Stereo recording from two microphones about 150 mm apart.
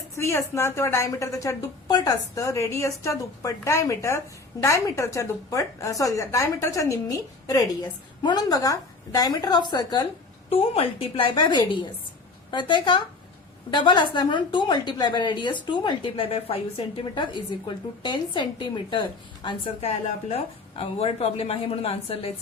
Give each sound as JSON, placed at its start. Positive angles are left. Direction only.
{"t": 0.2, "sound": "a woman's voice", "side_deg": 20}